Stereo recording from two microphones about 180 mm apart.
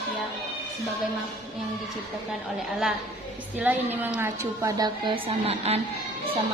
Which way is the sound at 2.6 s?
Centre (ahead or behind).